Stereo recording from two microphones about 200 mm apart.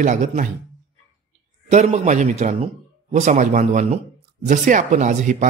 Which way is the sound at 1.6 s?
35° right (ahead or behind).